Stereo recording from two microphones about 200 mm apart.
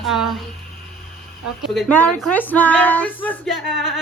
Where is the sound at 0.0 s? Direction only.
Centre (ahead or behind).